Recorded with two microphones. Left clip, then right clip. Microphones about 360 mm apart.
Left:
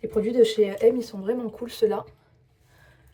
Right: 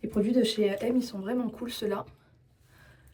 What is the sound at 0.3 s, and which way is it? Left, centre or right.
Speech, left.